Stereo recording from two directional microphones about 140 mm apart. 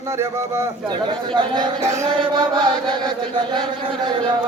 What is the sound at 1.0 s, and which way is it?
Speech, 35° right (ahead or behind).